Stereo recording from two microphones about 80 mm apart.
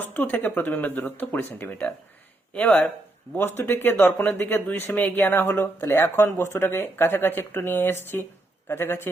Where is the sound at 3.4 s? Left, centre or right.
Left.